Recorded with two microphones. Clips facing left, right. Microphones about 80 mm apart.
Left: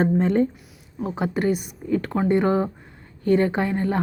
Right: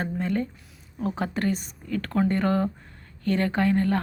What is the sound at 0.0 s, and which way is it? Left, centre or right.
Speech, left.